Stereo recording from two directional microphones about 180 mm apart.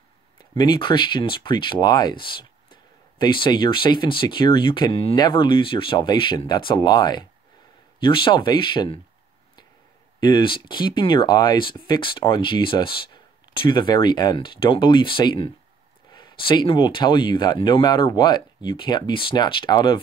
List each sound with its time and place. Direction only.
0.4 s speech: 25° left (ahead or behind)
10.2 s speech: 25° left (ahead or behind)